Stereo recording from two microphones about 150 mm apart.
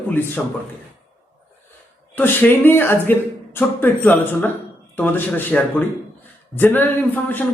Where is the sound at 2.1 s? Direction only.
10° left (ahead or behind).